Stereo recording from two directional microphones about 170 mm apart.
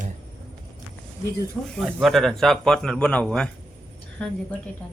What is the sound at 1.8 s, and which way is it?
A man's voice, centre (ahead or behind).